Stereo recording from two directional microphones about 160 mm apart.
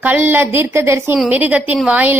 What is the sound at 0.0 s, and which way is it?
A woman's voice, 10° right (ahead or behind).